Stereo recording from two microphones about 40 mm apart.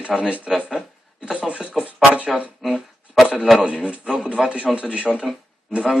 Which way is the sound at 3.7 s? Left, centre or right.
Right.